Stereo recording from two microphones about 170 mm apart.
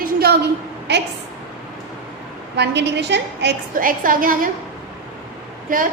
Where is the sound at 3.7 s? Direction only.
55° right (ahead or behind).